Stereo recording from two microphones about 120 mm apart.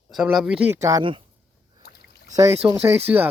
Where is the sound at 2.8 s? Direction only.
15° right (ahead or behind).